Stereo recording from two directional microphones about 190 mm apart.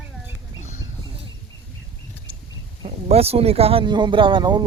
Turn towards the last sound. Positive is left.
turn(degrees=-25)  # may be behind; listen again after turning